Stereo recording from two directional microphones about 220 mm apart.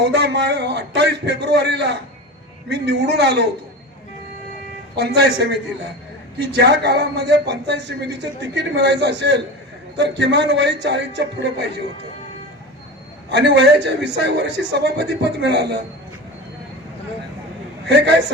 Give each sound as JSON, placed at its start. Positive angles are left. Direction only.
{"t": 0.0, "sound": "a man's voice", "side_deg": -50}
{"t": 4.9, "sound": "a man's voice", "side_deg": -50}
{"t": 13.3, "sound": "a man's voice", "side_deg": -50}
{"t": 17.8, "sound": "a man's voice", "side_deg": -50}